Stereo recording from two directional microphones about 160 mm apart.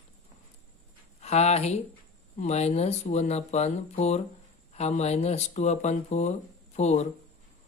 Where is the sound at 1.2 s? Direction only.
45° left (ahead or behind).